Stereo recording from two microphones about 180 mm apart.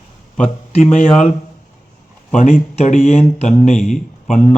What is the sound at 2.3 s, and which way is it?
A man's voice, 45° left (ahead or behind).